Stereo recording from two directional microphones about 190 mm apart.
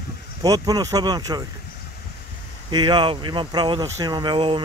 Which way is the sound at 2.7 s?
25° right (ahead or behind).